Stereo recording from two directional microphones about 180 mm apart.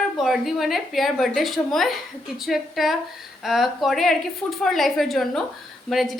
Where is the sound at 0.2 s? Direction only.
Centre (ahead or behind).